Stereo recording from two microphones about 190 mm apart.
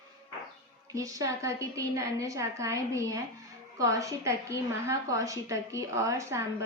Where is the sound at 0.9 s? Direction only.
15° right (ahead or behind).